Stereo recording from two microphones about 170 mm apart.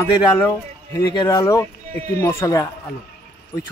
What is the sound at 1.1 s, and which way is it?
A man's voice, 25° left (ahead or behind).